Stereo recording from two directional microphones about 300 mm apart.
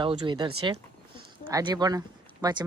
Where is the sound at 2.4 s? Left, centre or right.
Centre.